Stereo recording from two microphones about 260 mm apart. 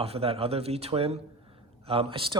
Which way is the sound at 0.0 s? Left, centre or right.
Right.